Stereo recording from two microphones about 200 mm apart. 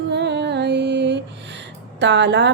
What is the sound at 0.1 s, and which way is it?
Female singing, 60° right (ahead or behind).